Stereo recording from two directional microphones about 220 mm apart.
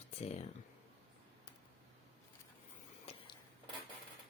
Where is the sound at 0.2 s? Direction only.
30° left (ahead or behind).